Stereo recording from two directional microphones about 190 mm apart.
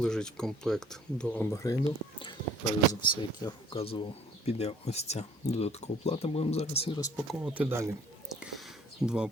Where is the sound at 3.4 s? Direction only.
30° left (ahead or behind).